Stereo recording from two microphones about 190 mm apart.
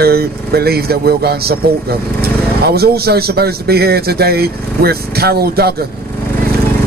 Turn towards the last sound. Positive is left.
turn(degrees=-55)  # may be behind; listen again after turning